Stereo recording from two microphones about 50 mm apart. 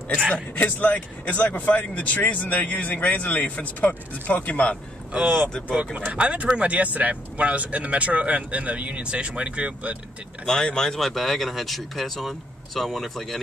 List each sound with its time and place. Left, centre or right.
0.3 s speech: left
5.2 s speech: right
6.1 s speech: right
10.4 s speech: centre